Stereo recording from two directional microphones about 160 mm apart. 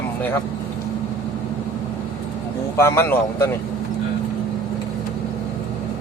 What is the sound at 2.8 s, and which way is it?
Speech, 15° left (ahead or behind).